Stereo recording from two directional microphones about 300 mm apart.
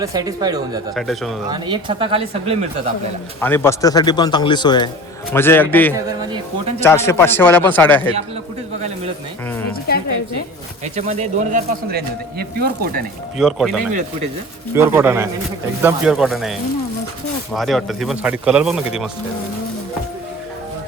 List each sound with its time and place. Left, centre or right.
0.0 s speech: centre
0.9 s a man's voice: centre
1.5 s speech: centre
3.4 s a man's voice: centre
10.9 s speech: right
13.4 s a man's voice: centre